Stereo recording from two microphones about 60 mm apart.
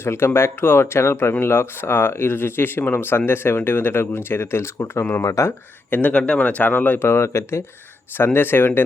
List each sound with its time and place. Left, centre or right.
0.0 s speech: left
5.9 s speech: left